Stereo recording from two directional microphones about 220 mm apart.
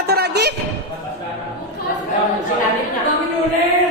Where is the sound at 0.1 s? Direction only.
50° right (ahead or behind).